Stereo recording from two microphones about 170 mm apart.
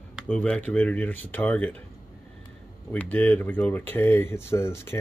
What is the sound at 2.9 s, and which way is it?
Speech, 10° left (ahead or behind).